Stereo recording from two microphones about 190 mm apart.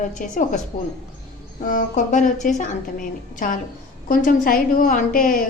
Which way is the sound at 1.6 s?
40° left (ahead or behind).